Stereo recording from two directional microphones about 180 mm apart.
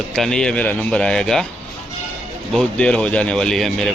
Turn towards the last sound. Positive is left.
turn(degrees=0)  # may be behind; listen again after turning